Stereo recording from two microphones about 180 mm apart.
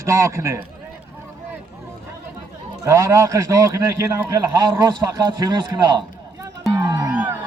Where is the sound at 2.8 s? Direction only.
15° right (ahead or behind).